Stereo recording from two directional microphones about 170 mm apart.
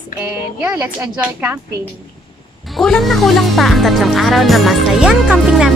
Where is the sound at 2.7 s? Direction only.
Centre (ahead or behind).